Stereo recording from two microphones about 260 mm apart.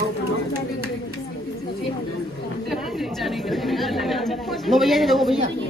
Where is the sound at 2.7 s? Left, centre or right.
Centre.